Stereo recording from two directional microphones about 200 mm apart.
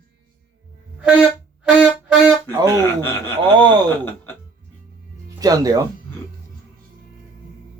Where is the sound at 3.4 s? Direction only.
20° right (ahead or behind).